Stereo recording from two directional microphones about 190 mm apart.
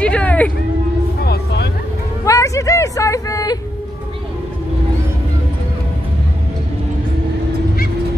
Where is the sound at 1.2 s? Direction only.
55° left (ahead or behind).